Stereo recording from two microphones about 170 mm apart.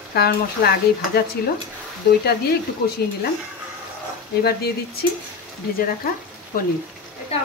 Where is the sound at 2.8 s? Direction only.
80° left.